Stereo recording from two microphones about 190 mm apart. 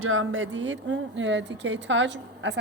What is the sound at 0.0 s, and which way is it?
Speech, 90° right.